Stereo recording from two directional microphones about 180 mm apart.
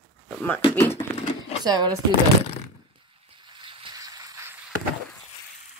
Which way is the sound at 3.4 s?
25° right (ahead or behind).